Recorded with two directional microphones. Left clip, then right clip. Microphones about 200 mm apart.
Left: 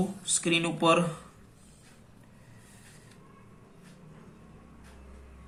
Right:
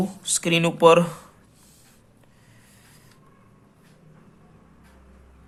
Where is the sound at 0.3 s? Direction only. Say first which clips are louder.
Right 6 dB; 55° right (ahead or behind).